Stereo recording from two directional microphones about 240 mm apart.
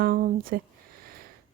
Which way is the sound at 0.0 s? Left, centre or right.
Right.